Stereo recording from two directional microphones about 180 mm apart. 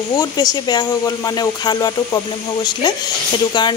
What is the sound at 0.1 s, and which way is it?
A woman's voice, 20° left (ahead or behind).